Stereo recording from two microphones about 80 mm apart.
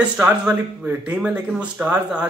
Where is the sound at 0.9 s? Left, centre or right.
Centre.